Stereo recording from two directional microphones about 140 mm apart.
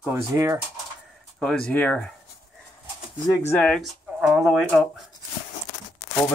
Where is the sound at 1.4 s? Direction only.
5° left (ahead or behind).